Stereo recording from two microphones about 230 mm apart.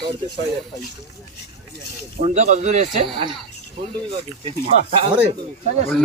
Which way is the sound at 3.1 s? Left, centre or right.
Right.